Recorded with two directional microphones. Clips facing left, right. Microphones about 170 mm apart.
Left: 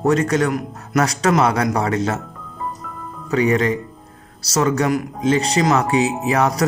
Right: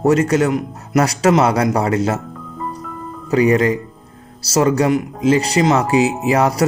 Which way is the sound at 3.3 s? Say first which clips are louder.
Right 3 dB; 30° right (ahead or behind).